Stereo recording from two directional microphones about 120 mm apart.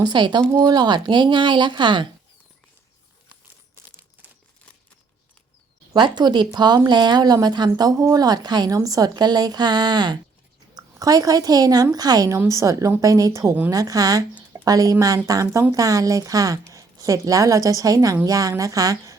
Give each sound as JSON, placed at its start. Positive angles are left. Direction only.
{"t": 0.0, "sound": "speech", "side_deg": -40}
{"t": 4.2, "sound": "crumpling", "side_deg": -15}
{"t": 5.9, "sound": "a woman's voice", "side_deg": -35}